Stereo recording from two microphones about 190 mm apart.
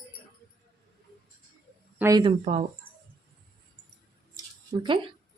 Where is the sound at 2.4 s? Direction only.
35° right (ahead or behind).